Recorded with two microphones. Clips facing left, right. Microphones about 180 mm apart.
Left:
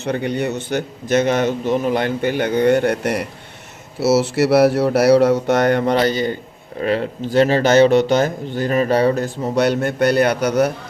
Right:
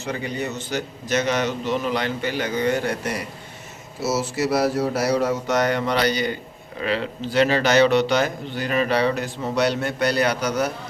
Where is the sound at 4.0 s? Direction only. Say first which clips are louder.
Left 8 dB; 75° left (ahead or behind); by 6.4 s 45° left (ahead or behind).